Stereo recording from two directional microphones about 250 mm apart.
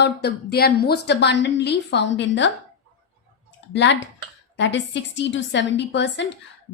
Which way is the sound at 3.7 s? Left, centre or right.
Left.